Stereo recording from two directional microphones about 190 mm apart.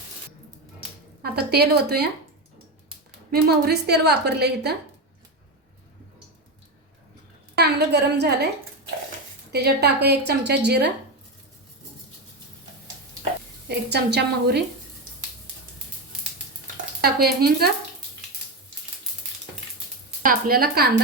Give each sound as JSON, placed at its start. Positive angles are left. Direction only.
{"t": 1.2, "sound": "a woman's voice", "side_deg": -55}
{"t": 3.3, "sound": "a woman's voice", "side_deg": -60}
{"t": 7.5, "sound": "a woman's voice", "side_deg": -60}
{"t": 9.5, "sound": "a woman's voice", "side_deg": -60}
{"t": 13.7, "sound": "a woman's voice", "side_deg": -60}
{"t": 17.0, "sound": "a woman's voice", "side_deg": -55}
{"t": 20.2, "sound": "a woman's voice", "side_deg": -50}